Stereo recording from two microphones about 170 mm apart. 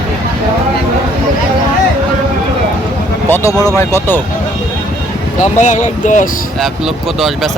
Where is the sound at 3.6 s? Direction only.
15° left (ahead or behind).